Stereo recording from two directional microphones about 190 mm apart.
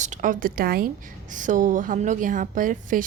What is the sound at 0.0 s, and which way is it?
Speech, 40° right (ahead or behind).